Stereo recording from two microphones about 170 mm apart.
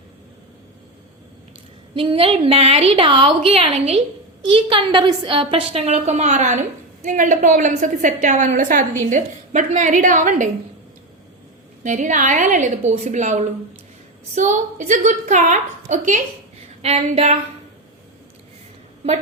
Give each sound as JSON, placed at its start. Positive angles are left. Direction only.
{"t": 2.0, "sound": "a woman's voice", "side_deg": -30}
{"t": 11.8, "sound": "a woman's voice", "side_deg": -45}